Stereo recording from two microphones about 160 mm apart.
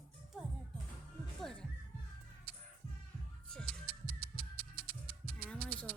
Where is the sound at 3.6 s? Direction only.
65° right (ahead or behind).